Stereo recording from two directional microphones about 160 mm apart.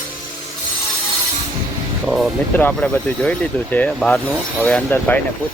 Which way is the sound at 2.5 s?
10° left (ahead or behind).